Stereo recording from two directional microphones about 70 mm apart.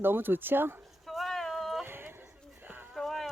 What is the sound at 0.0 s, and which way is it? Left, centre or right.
Speech, right.